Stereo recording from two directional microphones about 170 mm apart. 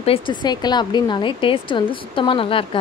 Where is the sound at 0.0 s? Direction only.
30° left (ahead or behind).